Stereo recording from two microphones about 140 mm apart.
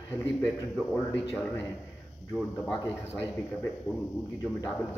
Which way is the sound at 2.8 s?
15° left (ahead or behind).